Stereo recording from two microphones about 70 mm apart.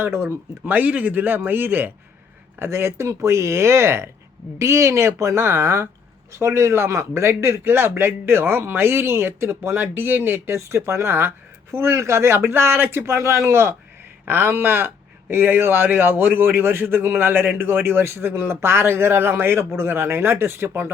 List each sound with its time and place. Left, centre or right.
0.0 s speech: right